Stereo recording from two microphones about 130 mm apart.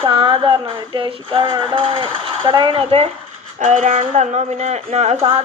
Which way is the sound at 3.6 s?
75° right (ahead or behind).